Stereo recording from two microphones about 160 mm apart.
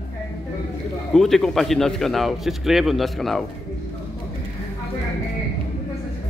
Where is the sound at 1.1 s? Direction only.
Centre (ahead or behind).